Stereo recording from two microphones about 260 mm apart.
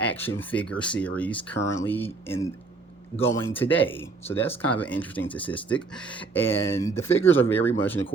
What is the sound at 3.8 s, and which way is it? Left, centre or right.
Speech, left.